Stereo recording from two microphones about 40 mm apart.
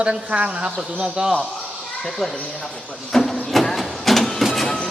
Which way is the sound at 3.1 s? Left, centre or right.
Centre.